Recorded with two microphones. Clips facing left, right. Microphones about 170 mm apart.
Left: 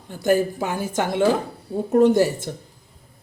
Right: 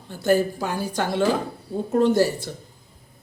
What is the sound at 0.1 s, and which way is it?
A woman's voice, 15° left (ahead or behind).